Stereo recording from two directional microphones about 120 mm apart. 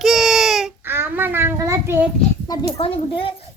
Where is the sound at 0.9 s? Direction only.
20° right (ahead or behind).